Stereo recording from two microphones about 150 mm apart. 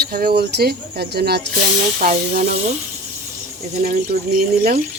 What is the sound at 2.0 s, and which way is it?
Speech, 65° right (ahead or behind).